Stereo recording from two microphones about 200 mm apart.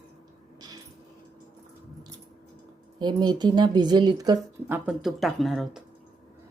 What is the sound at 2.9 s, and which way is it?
Speech, 20° right (ahead or behind).